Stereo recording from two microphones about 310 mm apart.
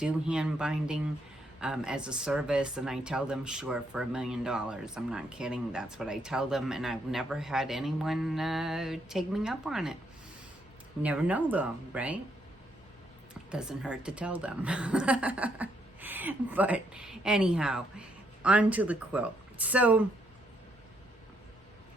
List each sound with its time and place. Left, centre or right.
0.0 s speech: centre
11.0 s speech: centre
13.5 s speech: centre